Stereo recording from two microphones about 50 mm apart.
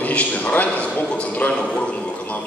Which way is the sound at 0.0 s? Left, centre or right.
Left.